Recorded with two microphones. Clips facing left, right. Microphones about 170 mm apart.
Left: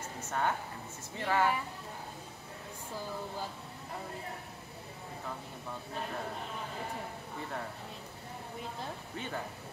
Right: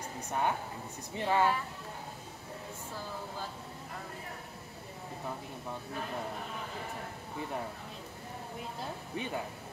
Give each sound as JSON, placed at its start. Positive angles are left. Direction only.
{"t": 0.3, "sound": "speech", "side_deg": -15}
{"t": 9.1, "sound": "speech", "side_deg": -15}